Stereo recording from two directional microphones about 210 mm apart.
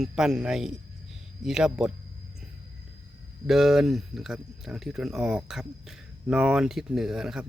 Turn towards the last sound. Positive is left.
turn(degrees=-5)  # may be behind; listen again after turning